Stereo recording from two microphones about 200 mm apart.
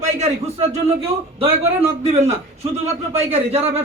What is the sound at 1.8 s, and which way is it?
A man's voice, 30° right (ahead or behind).